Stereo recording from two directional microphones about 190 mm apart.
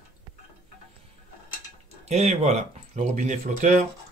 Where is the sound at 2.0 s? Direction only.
35° right (ahead or behind).